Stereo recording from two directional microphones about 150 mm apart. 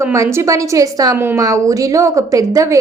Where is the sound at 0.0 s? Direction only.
20° right (ahead or behind).